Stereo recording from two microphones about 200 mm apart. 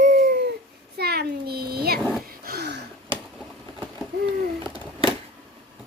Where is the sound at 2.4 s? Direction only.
55° right (ahead or behind).